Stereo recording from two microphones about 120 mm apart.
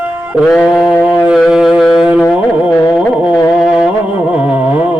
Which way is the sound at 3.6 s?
5° right (ahead or behind).